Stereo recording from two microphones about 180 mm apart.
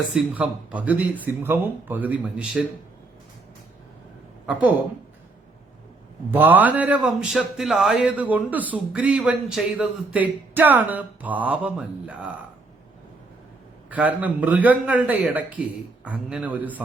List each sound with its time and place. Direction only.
0.1 s a man's voice: 5° right (ahead or behind)
6.3 s a man's voice: 10° right (ahead or behind)
13.9 s a man's voice: 10° right (ahead or behind)